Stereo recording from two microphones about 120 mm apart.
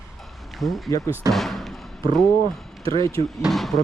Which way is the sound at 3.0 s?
30° left (ahead or behind).